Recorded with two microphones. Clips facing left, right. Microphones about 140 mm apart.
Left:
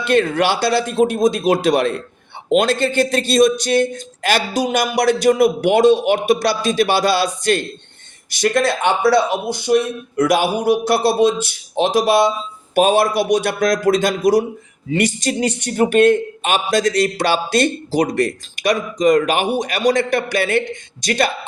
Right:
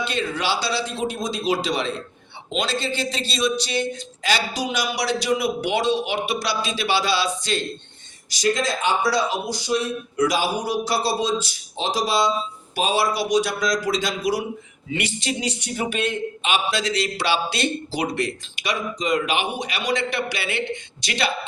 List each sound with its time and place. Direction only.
0.0 s a man's voice: 55° left (ahead or behind)